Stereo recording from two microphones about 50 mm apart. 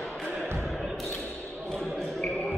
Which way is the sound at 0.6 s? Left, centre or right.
Centre.